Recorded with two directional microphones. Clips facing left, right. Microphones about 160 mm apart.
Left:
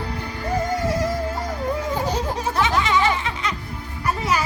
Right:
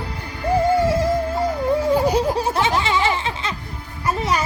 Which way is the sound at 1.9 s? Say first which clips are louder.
Right 7 dB; 10° right (ahead or behind).